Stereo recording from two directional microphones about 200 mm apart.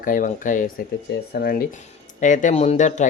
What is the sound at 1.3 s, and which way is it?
Speech, 50° left (ahead or behind).